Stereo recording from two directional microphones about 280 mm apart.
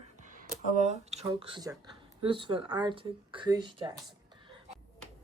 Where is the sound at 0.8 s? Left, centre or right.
Right.